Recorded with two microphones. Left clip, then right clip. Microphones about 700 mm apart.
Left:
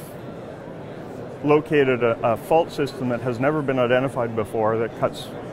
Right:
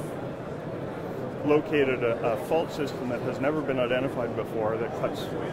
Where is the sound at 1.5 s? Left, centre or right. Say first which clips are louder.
Left 6 dB; left.